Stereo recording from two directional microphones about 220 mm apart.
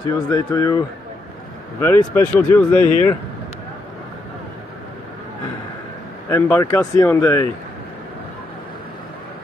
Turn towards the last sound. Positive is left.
turn(degrees=10)  # may be behind; listen again after turning